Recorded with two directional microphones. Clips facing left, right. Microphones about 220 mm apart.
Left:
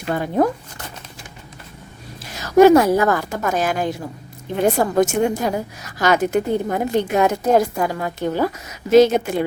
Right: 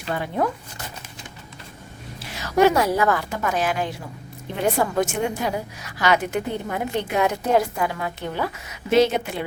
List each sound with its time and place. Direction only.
0.1 s speech: 40° left (ahead or behind)
2.3 s a woman's voice: 40° left (ahead or behind)